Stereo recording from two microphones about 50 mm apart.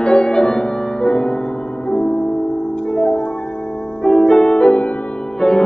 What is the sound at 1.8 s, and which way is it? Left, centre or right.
Music, left.